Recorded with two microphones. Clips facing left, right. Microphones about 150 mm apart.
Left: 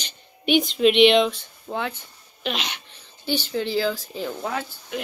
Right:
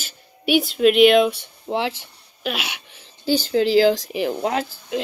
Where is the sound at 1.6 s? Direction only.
25° right (ahead or behind).